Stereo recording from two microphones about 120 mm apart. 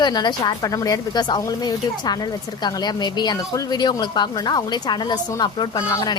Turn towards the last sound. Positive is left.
turn(degrees=35)  # may be behind; listen again after turning